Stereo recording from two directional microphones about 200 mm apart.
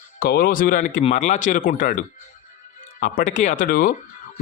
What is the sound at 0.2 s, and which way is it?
A man's voice, 50° left (ahead or behind).